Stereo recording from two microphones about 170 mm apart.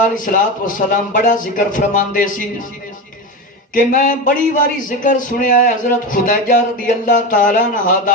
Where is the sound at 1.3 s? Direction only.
50° left (ahead or behind).